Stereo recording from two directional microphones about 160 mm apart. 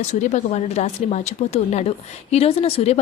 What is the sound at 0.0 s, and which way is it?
A woman's voice, 45° left (ahead or behind).